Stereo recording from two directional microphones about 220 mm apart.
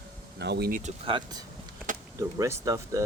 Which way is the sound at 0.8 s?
25° right (ahead or behind).